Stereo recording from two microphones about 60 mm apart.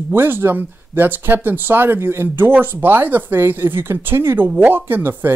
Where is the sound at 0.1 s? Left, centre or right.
Right.